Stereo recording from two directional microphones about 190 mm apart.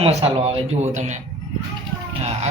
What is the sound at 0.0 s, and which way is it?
A man's voice, 35° right (ahead or behind).